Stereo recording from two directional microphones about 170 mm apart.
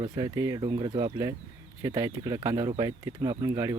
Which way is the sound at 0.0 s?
20° right (ahead or behind).